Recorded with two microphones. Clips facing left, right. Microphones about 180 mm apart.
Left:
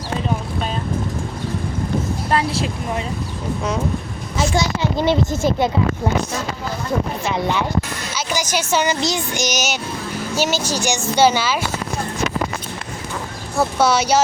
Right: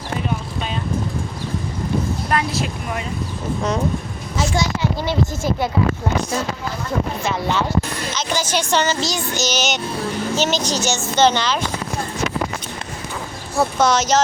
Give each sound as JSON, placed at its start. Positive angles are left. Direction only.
{"t": 2.3, "sound": "speech", "side_deg": 30}
{"t": 4.4, "sound": "speech", "side_deg": 20}
{"t": 8.1, "sound": "speech", "side_deg": 10}
{"t": 13.6, "sound": "speech", "side_deg": 10}